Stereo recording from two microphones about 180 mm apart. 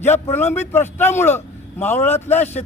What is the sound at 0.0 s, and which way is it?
A man's voice, 10° left (ahead or behind).